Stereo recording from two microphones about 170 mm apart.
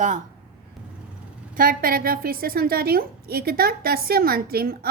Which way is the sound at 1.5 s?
55° right (ahead or behind).